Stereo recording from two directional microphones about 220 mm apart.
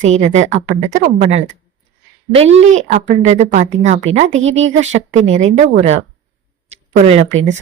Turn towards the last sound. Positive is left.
turn(degrees=-30)  # may be behind; listen again after turning